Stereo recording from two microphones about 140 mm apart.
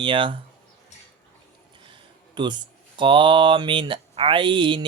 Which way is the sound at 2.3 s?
35° right (ahead or behind).